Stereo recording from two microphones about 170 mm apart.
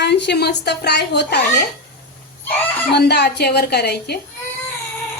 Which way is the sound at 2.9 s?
75° left (ahead or behind).